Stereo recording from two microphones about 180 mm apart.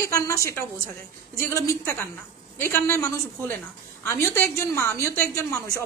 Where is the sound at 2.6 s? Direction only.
10° left (ahead or behind).